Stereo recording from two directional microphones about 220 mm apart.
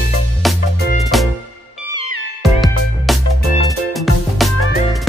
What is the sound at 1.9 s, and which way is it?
Music, 90° left.